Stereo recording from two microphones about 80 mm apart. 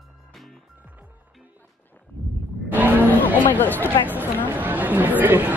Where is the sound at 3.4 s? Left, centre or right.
Left.